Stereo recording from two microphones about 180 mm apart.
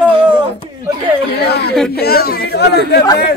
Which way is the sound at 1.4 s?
65° left (ahead or behind).